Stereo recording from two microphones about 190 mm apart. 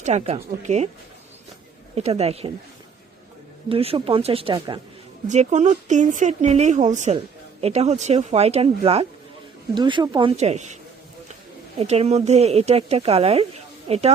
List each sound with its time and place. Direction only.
0.0 s speech: 35° right (ahead or behind)
2.0 s speech: 35° right (ahead or behind)
3.7 s speech: 30° right (ahead or behind)
4.5 s speech: 20° right (ahead or behind)
5.3 s speech: 40° right (ahead or behind)
11.8 s speech: 35° right (ahead or behind)